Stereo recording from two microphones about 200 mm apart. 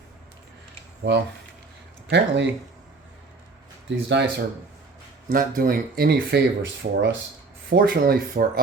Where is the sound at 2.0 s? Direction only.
60° right (ahead or behind).